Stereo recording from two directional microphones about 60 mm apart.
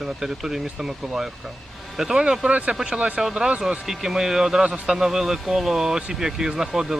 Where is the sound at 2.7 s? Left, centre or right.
Centre.